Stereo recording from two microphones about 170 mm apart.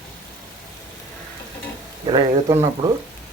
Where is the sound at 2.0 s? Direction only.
25° right (ahead or behind).